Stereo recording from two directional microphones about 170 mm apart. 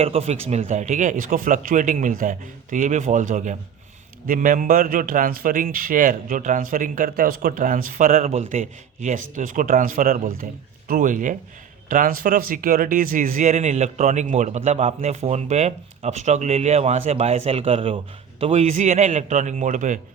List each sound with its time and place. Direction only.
0.0 s speech: 35° right (ahead or behind)